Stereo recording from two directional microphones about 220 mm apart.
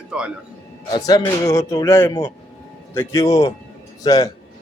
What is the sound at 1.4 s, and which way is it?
Speech, 15° left (ahead or behind).